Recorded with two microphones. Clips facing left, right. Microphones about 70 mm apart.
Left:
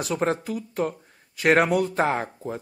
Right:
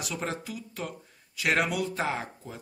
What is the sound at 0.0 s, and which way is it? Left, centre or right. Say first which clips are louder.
Speech: left 9 dB; left.